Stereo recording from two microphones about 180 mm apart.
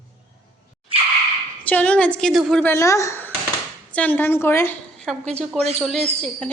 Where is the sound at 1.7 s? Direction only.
5° left (ahead or behind).